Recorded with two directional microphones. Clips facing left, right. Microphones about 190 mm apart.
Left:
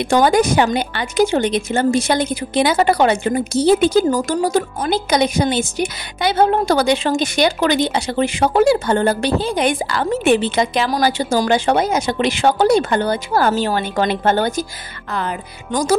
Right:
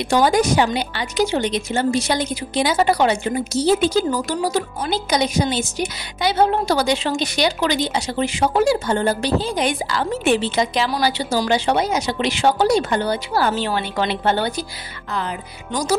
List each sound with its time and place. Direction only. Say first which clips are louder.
0.1 s speech: left 2 dB; 55° left (ahead or behind)